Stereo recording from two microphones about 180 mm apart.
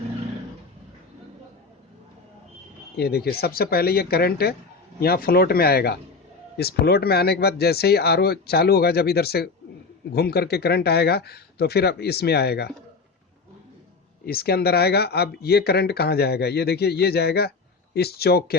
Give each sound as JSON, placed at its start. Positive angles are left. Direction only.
{"t": 2.9, "sound": "speech", "side_deg": 60}
{"t": 14.3, "sound": "speech", "side_deg": 60}